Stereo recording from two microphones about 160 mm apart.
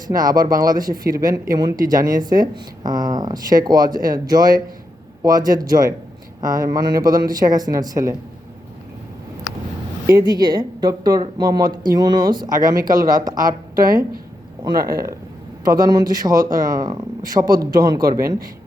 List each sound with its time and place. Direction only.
0.1 s speech: 25° right (ahead or behind)
10.1 s speech: 25° right (ahead or behind)
13.8 s speech: 60° right (ahead or behind)
14.8 s speech: 20° right (ahead or behind)